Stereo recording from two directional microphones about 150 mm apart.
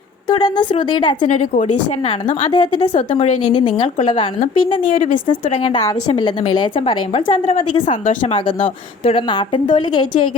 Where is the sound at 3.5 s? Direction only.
30° left (ahead or behind).